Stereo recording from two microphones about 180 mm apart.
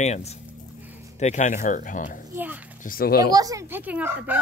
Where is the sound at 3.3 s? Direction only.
20° right (ahead or behind).